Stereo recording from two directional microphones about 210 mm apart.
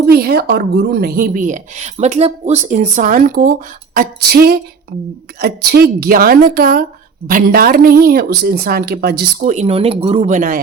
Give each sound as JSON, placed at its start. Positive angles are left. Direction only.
{"t": 0.0, "sound": "a woman's voice", "side_deg": -45}